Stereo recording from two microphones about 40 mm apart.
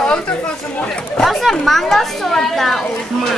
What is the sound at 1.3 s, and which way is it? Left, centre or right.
A woman's voice, centre.